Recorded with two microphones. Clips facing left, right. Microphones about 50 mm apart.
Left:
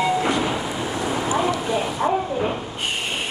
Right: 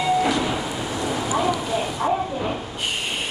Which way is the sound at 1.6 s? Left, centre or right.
Centre.